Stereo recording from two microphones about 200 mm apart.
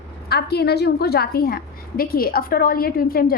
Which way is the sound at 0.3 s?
50° left (ahead or behind).